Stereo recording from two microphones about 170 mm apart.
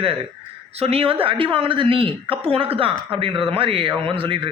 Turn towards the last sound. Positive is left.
turn(degrees=-30)  # may be behind; listen again after turning